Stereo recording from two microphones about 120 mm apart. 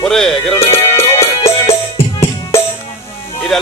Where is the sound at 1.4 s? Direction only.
55° left (ahead or behind).